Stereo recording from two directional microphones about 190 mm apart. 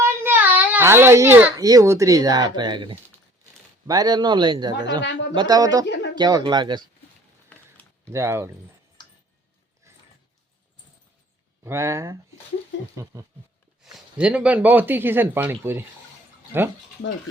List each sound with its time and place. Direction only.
0.0 s a child's voice: 10° right (ahead or behind)
7.5 s a sound: 10° left (ahead or behind)
8.1 s speech: 15° right (ahead or behind)
9.0 s a sound: 25° left (ahead or behind)
11.6 s speech: 15° right (ahead or behind)
13.8 s speech: 5° right (ahead or behind)